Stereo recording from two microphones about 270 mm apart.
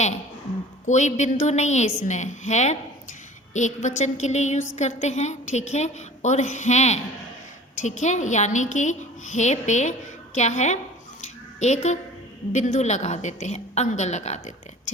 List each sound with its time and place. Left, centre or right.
0.9 s a woman's voice: left
11.2 s a sound: left
12.5 s a woman's voice: left